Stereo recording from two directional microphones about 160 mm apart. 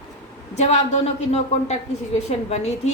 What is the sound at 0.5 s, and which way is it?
A woman's voice, 45° left (ahead or behind).